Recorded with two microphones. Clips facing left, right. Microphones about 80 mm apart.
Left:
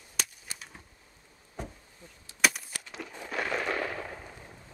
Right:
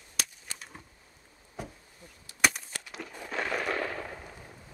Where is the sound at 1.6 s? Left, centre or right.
Centre.